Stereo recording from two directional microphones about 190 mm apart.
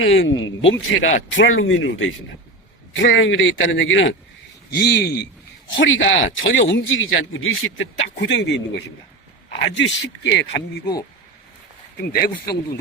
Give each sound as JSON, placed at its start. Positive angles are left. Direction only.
{"t": 0.0, "sound": "a man's voice", "side_deg": 85}
{"t": 4.7, "sound": "speech", "side_deg": 60}
{"t": 5.6, "sound": "a man's voice", "side_deg": 80}
{"t": 8.2, "sound": "speech", "side_deg": 65}
{"t": 11.9, "sound": "speech", "side_deg": 55}